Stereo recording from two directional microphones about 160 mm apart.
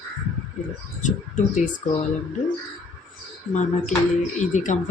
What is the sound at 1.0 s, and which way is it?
Speech, 50° left (ahead or behind).